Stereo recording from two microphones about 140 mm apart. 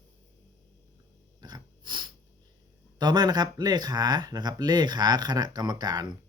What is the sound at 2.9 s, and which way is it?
Speech, 30° right (ahead or behind).